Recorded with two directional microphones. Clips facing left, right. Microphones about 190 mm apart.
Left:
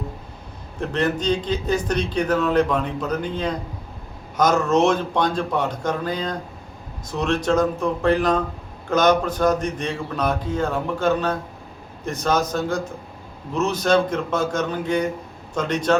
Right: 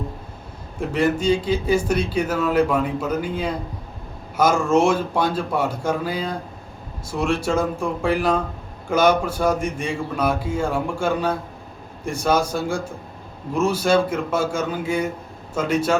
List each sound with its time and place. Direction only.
0.8 s a man's voice: 10° right (ahead or behind)